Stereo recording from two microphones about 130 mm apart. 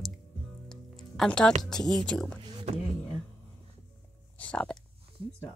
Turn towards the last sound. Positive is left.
turn(degrees=10)  # may be behind; listen again after turning